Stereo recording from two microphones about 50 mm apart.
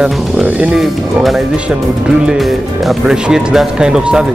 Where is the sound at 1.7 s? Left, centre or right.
Centre.